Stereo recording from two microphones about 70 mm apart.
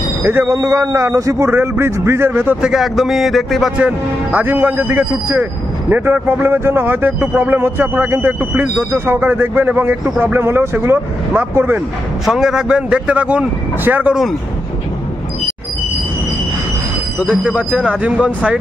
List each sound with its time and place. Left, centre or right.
0.2 s speech: right
0.5 s a man's voice: right
1.5 s a man's voice: right
2.6 s speech: centre
3.7 s a man's voice: centre
12.3 s speech: centre; by 14.1 s right
17.3 s speech: centre